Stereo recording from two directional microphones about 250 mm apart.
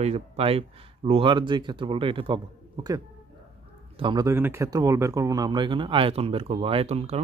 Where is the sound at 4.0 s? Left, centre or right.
Centre.